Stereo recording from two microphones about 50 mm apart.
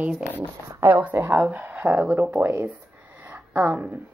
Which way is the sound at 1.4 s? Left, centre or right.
Right.